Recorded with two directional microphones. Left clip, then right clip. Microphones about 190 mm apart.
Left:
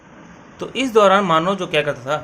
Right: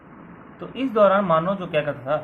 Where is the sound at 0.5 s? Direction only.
60° left (ahead or behind).